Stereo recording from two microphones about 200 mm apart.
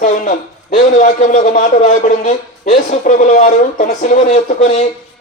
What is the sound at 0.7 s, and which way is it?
A man's voice, 40° left (ahead or behind).